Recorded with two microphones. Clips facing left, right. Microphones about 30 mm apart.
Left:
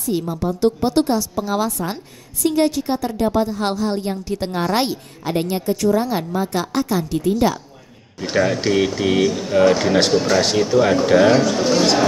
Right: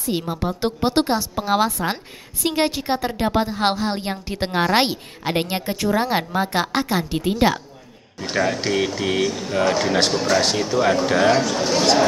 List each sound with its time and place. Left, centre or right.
0.0 s a woman's voice: right
8.2 s speech: centre